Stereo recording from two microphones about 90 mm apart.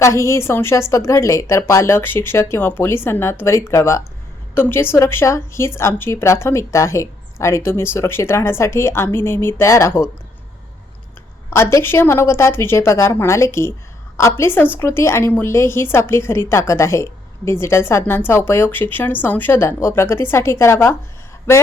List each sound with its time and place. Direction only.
0.0 s a woman's voice: 30° left (ahead or behind)
11.5 s a woman's voice: 25° left (ahead or behind)